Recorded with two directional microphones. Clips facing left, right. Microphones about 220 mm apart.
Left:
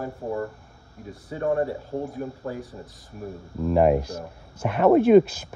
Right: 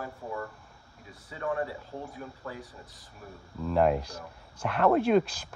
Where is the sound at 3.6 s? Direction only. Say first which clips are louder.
Left 6 dB; 5° left (ahead or behind).